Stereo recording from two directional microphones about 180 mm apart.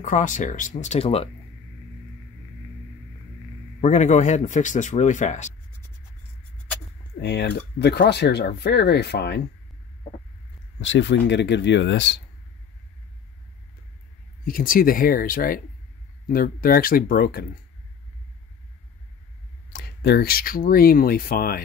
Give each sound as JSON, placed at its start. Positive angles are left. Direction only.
{"t": 0.0, "sound": "speech", "side_deg": 45}
{"t": 3.8, "sound": "speech", "side_deg": 40}
{"t": 7.2, "sound": "speech", "side_deg": 70}
{"t": 10.8, "sound": "speech", "side_deg": 90}
{"t": 14.4, "sound": "speech", "side_deg": 50}
{"t": 19.7, "sound": "speech", "side_deg": 60}